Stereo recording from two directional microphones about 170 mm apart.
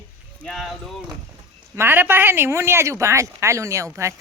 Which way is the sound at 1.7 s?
10° right (ahead or behind).